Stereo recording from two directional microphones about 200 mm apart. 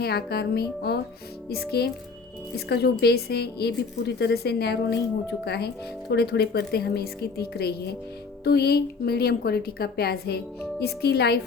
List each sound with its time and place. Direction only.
0.0 s speech: 55° left (ahead or behind)